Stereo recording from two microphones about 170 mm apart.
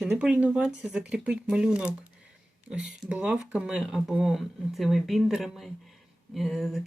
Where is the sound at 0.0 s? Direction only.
5° right (ahead or behind).